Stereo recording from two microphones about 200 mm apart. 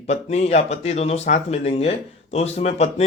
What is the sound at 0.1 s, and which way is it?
Speech, 35° left (ahead or behind).